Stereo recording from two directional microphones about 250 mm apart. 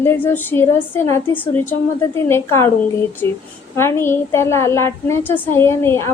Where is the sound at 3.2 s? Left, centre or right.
Right.